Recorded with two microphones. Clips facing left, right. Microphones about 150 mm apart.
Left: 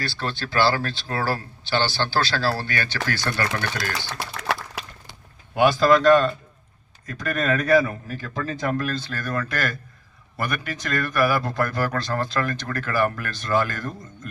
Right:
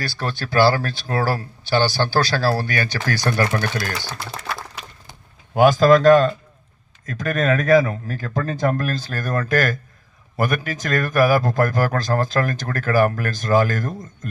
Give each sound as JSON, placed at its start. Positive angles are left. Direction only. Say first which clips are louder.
{"t": 0.0, "sound": "speech", "louder": "right 2 dB", "side_deg": -40}
{"t": 5.5, "sound": "speech", "louder": "right 4 dB", "side_deg": -45}